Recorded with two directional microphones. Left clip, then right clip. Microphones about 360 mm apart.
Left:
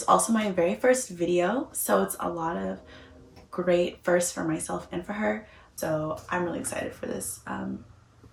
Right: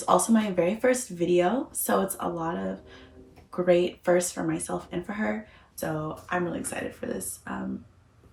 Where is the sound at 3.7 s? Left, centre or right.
Centre.